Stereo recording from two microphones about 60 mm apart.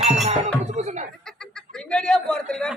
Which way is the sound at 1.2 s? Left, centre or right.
Centre.